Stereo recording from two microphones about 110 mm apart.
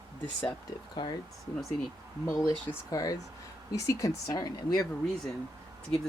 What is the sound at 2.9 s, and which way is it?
Speech, 35° left (ahead or behind).